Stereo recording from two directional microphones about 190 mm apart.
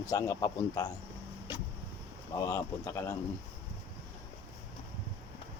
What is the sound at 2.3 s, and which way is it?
Speech, 15° left (ahead or behind).